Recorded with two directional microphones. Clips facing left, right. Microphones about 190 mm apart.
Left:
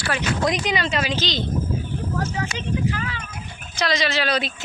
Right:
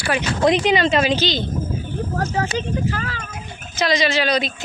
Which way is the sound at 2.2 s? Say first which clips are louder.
Right 7 dB; 45° right (ahead or behind).